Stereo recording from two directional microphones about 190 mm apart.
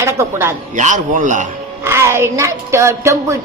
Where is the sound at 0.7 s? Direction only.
40° right (ahead or behind).